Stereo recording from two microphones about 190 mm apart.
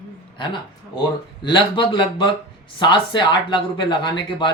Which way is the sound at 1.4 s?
25° left (ahead or behind).